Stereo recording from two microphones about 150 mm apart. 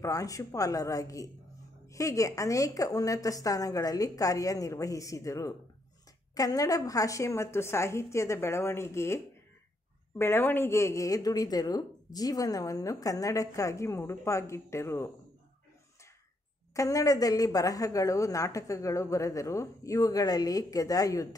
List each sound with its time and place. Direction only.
0.0 s speech: 20° left (ahead or behind)
16.7 s speech: 20° left (ahead or behind)